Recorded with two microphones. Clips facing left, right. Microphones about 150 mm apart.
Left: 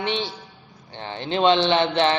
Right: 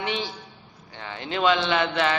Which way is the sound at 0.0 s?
30° left (ahead or behind).